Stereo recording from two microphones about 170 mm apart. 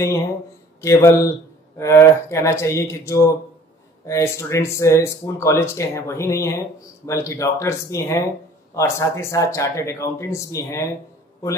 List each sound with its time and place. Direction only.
0.7 s speech: 15° left (ahead or behind)